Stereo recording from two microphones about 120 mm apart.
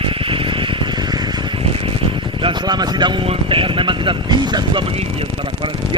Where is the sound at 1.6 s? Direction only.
50° right (ahead or behind).